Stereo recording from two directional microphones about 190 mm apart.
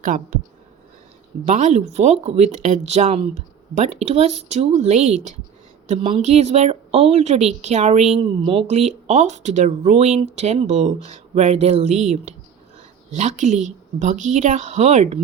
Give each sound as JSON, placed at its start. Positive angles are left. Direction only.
{"t": 0.0, "sound": "speech", "side_deg": -45}
{"t": 1.5, "sound": "speech", "side_deg": -40}